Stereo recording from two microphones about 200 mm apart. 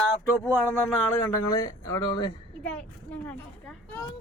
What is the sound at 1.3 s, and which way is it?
A child's voice, 15° left (ahead or behind).